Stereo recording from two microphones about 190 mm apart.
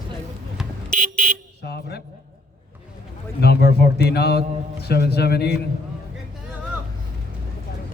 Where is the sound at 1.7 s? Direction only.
55° left (ahead or behind).